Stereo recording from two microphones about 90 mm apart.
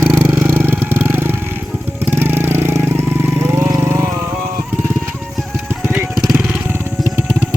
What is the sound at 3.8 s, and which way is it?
Vehicle, 30° right (ahead or behind).